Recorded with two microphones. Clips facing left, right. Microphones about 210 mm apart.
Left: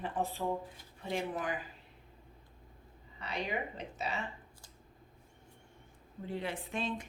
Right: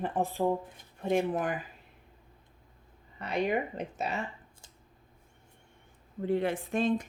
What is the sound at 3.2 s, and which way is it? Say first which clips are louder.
Speech: right 8 dB; 50° right (ahead or behind).